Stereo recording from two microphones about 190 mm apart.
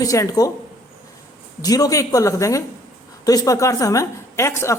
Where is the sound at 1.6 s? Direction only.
20° left (ahead or behind).